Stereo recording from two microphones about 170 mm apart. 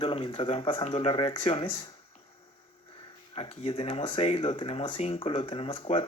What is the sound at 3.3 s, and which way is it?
Speech, 35° left (ahead or behind).